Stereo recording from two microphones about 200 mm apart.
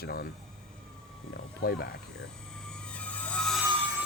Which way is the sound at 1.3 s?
50° left (ahead or behind).